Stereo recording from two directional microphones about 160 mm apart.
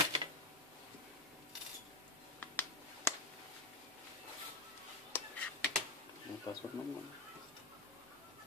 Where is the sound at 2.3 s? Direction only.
10° left (ahead or behind).